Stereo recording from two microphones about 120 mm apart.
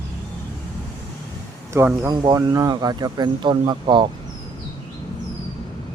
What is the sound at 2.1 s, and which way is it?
Speech, 35° right (ahead or behind).